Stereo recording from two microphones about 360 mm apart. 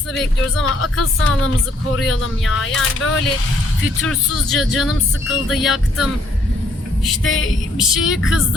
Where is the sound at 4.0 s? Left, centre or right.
Centre.